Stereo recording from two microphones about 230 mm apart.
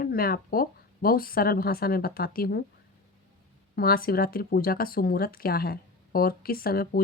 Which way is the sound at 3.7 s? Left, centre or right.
Left.